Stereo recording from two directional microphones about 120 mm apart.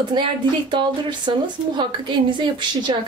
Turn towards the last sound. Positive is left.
turn(degrees=-40)  # may be behind; listen again after turning